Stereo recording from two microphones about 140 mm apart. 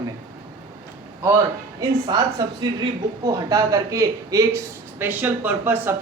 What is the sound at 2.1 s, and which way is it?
A man's voice, 30° right (ahead or behind).